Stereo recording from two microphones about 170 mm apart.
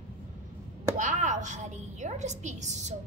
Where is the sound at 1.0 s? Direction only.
45° right (ahead or behind).